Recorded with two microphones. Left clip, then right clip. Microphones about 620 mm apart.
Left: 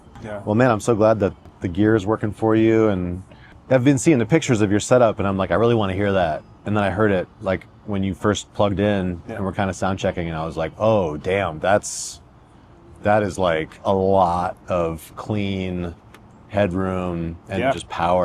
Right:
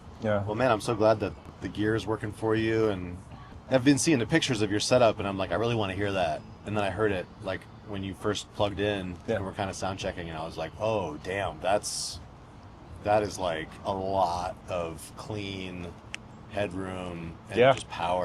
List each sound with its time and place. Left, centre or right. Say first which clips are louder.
0.4 s speech: left 12 dB; left